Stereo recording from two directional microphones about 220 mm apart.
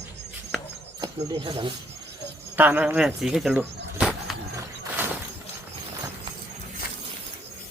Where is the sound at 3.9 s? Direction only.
Centre (ahead or behind).